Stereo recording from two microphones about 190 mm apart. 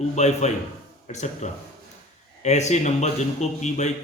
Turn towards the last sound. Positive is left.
turn(degrees=40)  # may be behind; listen again after turning